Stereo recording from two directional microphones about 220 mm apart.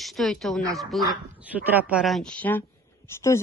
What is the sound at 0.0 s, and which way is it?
A woman's voice, centre (ahead or behind).